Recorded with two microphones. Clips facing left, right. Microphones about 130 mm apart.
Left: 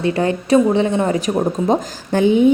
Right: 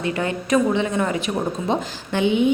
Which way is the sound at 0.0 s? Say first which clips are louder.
Left 6 dB; 30° left (ahead or behind).